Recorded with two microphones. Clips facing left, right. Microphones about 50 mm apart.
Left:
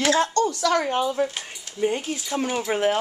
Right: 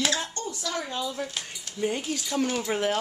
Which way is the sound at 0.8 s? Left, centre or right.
Left.